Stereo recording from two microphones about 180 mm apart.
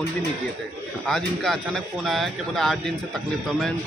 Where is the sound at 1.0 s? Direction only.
Centre (ahead or behind).